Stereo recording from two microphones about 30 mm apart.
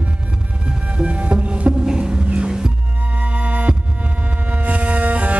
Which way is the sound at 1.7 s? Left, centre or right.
Right.